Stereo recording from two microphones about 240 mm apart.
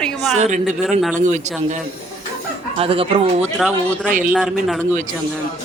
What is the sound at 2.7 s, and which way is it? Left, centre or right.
Speech, right.